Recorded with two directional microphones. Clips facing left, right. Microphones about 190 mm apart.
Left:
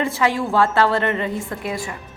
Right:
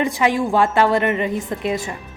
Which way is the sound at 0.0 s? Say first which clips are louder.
Right 2 dB; 15° right (ahead or behind).